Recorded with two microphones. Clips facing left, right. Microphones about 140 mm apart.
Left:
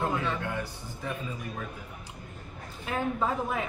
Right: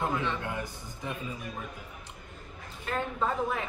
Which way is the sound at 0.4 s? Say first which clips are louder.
Left 2 dB; 15° right (ahead or behind).